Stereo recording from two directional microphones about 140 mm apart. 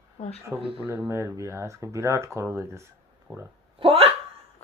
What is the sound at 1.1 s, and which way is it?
Speech, 20° right (ahead or behind).